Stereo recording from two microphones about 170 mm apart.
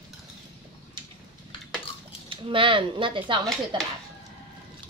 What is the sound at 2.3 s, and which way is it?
Speech, 30° right (ahead or behind).